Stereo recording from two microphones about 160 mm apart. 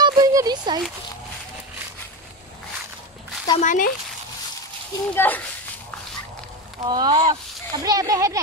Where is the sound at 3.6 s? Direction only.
55° left (ahead or behind).